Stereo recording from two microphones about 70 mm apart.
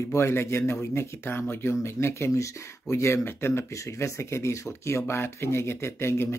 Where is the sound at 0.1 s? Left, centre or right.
Left.